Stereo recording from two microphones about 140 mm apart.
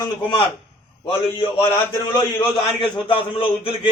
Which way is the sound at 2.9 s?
35° left (ahead or behind).